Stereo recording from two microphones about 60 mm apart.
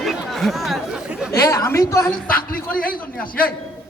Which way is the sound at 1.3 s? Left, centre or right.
Left.